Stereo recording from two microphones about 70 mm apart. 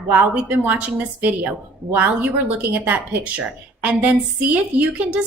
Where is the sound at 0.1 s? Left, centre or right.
Right.